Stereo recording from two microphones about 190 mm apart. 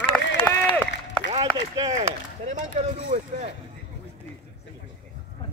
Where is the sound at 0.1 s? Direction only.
5° left (ahead or behind).